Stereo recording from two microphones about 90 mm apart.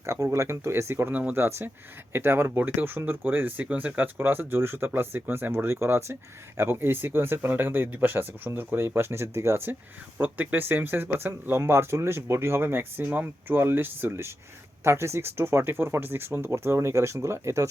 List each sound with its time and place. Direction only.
0.0 s speech: 30° right (ahead or behind)
1.1 s speech: 15° right (ahead or behind)
1.4 s speech: 30° right (ahead or behind)